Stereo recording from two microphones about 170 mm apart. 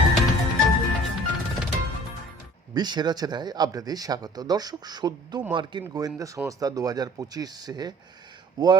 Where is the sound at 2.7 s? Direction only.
25° right (ahead or behind).